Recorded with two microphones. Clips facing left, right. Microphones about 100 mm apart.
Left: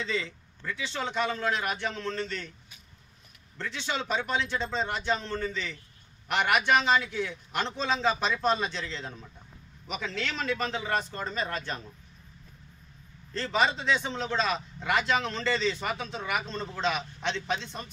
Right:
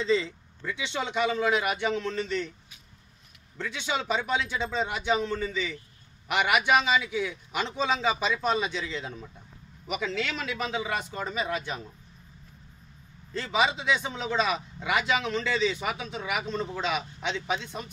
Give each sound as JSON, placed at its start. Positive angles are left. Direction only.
{"t": 0.0, "sound": "speech", "side_deg": -30}
{"t": 0.6, "sound": "a man's voice", "side_deg": -15}
{"t": 3.5, "sound": "a man's voice", "side_deg": -10}
{"t": 13.3, "sound": "a man's voice", "side_deg": -10}